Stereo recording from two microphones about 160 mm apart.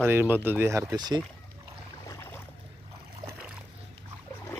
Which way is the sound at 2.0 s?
15° left (ahead or behind).